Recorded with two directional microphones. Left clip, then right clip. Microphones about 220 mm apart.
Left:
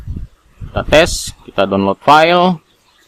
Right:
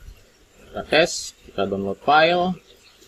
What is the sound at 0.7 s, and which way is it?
Speech, 25° left (ahead or behind).